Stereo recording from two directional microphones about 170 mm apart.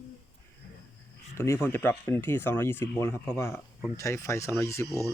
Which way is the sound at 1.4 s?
15° left (ahead or behind).